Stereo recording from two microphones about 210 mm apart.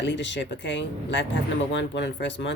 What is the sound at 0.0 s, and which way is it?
Speech, 55° left (ahead or behind).